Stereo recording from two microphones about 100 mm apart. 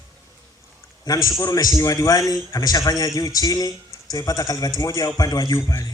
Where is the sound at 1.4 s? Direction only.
40° left (ahead or behind).